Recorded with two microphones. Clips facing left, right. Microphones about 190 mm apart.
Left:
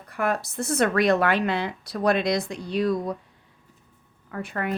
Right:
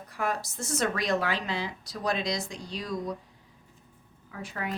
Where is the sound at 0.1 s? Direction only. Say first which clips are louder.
Left 5 dB; 60° left (ahead or behind).